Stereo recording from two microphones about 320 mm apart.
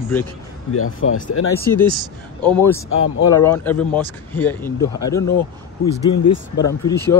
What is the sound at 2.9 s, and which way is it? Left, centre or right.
Speech, left.